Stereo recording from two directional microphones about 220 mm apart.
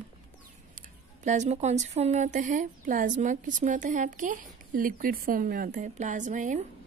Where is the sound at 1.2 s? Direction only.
30° right (ahead or behind).